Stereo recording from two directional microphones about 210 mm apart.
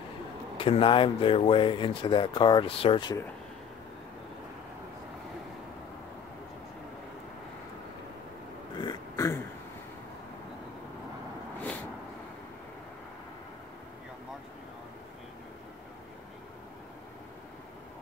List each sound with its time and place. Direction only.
0.6 s speech: 25° left (ahead or behind)
8.7 s throat clearing: 20° left (ahead or behind)